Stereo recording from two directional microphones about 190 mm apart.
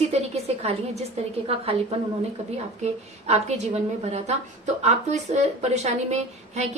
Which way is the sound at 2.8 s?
35° right (ahead or behind).